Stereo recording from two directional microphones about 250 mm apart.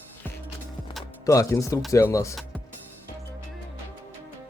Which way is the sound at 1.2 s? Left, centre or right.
Centre.